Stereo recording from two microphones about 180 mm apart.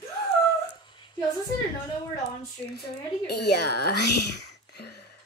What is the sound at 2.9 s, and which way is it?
Speech, 65° left (ahead or behind).